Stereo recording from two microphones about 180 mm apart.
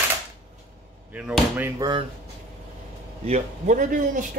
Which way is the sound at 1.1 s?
10° right (ahead or behind).